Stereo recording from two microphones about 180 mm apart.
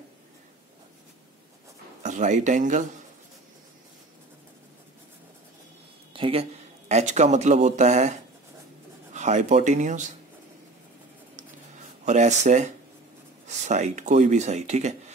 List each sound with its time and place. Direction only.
2.0 s speech: 45° right (ahead or behind)
6.1 s a sound: 30° right (ahead or behind)
6.9 s speech: 40° right (ahead or behind)
12.0 s speech: 40° right (ahead or behind)